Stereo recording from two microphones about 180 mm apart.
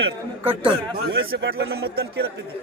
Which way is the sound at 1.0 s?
80° right.